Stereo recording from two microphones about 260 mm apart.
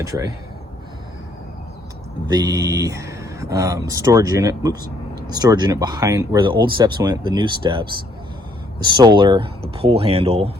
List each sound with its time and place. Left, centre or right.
0.0 s speech: centre
2.3 s speech: centre